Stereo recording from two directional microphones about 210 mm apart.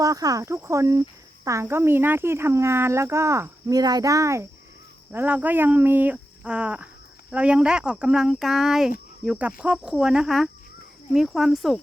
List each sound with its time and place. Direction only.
0.0 s speech: 15° right (ahead or behind); by 11.8 s centre (ahead or behind)